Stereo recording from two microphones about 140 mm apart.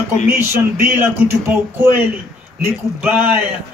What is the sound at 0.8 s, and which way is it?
A man's voice, 15° right (ahead or behind).